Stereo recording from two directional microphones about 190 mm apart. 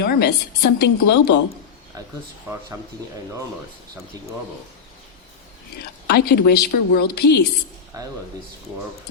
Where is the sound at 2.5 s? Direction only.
15° right (ahead or behind).